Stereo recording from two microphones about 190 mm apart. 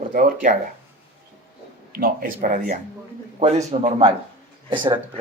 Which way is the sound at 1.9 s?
50° right (ahead or behind).